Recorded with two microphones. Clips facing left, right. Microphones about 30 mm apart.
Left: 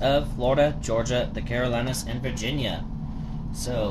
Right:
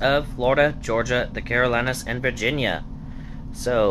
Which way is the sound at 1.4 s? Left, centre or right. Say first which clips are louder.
Right 5 dB; right.